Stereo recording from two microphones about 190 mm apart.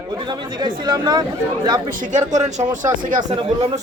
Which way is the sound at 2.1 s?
40° right (ahead or behind).